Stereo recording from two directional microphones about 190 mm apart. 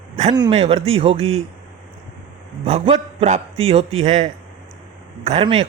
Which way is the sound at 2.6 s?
30° right (ahead or behind).